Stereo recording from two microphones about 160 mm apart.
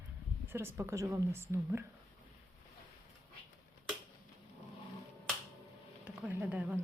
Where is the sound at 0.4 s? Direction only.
15° right (ahead or behind).